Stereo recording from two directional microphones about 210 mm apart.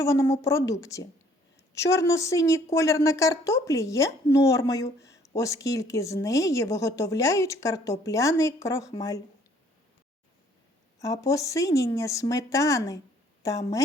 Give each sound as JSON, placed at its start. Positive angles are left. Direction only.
{"t": 0.0, "sound": "speech", "side_deg": 15}
{"t": 11.0, "sound": "speech", "side_deg": 15}